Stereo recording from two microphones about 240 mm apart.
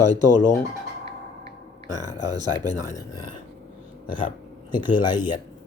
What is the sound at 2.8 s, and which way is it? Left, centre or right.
Speech, centre.